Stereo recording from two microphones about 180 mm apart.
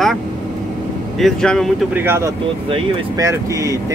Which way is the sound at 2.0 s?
15° right (ahead or behind).